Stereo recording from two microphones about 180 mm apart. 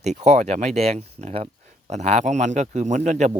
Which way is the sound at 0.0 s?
40° right (ahead or behind).